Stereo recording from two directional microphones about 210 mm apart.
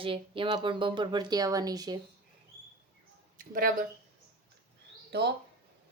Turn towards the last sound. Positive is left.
turn(degrees=-50)  # may be behind; listen again after turning